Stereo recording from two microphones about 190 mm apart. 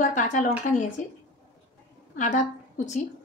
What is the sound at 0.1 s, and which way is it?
Speech, 40° left (ahead or behind).